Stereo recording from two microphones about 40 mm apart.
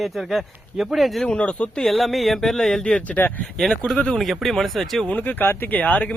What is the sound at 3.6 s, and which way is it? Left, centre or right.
Speech, centre.